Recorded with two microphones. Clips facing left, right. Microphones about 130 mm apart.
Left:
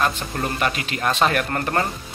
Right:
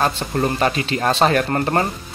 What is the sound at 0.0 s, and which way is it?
Speech, 35° right (ahead or behind).